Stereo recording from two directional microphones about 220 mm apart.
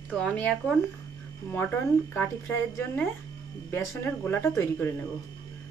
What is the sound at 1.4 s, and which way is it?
A woman's voice, 10° left (ahead or behind).